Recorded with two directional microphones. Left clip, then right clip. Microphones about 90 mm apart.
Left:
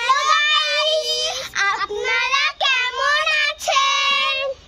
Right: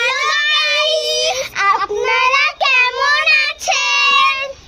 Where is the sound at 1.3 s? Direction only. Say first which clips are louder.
Right 6 dB; 40° left (ahead or behind).